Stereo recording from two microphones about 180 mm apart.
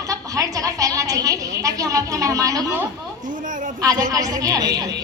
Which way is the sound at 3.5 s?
45° right (ahead or behind).